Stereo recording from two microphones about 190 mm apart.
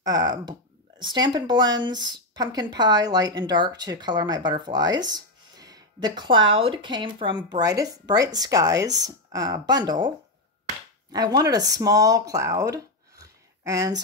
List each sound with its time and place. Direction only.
0.0 s a woman's voice: 20° right (ahead or behind)